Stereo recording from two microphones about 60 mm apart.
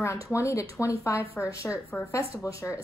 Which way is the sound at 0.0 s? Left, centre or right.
Left.